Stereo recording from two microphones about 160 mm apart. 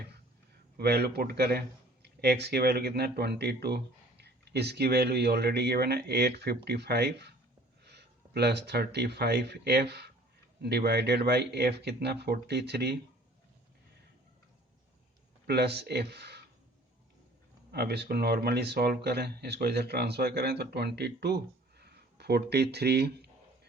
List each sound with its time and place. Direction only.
0.8 s a man's voice: 90° right
15.4 s a man's voice: 90° right
17.7 s a man's voice: 85° right